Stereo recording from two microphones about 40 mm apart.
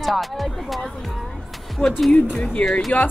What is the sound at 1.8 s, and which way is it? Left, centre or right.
Speech, centre.